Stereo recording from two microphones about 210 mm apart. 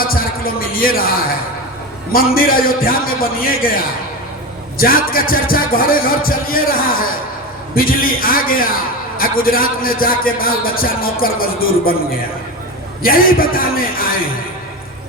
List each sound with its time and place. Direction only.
0.0 s a man's voice: 45° left (ahead or behind)
2.1 s a man's voice: 45° left (ahead or behind)
4.8 s a man's voice: 45° left (ahead or behind)
13.0 s a man's voice: 45° left (ahead or behind)